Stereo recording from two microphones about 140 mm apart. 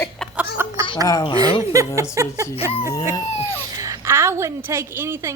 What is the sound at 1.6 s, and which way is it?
Speech, 20° right (ahead or behind).